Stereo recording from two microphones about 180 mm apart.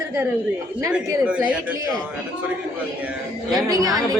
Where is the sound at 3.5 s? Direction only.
20° right (ahead or behind).